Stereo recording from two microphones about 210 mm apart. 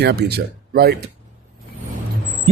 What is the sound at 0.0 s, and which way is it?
Speech, 50° right (ahead or behind).